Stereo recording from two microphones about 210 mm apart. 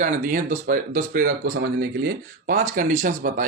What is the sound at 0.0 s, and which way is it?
Speech, 40° right (ahead or behind).